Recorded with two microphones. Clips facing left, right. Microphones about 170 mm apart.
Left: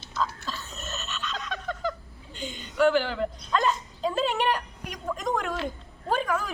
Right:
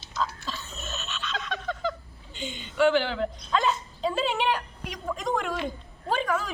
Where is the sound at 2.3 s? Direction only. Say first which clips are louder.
Even; 40° left (ahead or behind).